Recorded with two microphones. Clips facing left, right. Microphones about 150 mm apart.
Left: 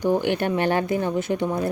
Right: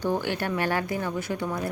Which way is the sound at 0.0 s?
15° left (ahead or behind).